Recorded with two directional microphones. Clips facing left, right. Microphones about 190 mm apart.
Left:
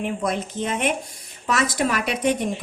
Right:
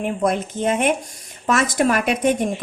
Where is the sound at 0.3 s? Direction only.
50° right (ahead or behind).